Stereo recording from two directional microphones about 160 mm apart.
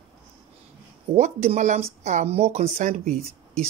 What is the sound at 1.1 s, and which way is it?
Speech, 45° right (ahead or behind).